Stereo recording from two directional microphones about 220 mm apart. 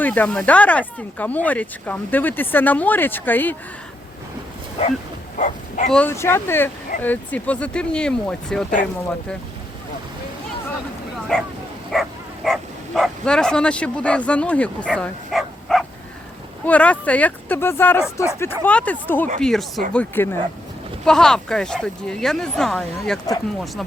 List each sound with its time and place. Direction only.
0.0 s speech: 5° left (ahead or behind)
4.8 s speech: 25° left (ahead or behind)
5.4 s bow-wow: 35° left (ahead or behind)
5.9 s speech: 10° left (ahead or behind)
11.3 s speech: centre (ahead or behind)
11.9 s bow-wow: centre (ahead or behind)
12.5 s speech: centre (ahead or behind)